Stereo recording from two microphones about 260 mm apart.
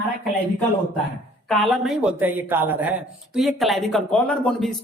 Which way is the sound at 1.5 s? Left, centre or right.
Centre.